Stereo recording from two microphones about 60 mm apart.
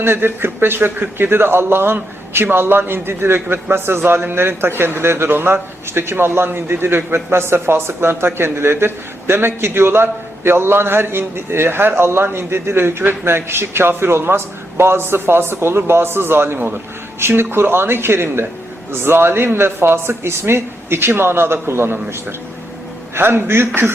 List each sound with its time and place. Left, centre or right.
0.0 s a man's voice: right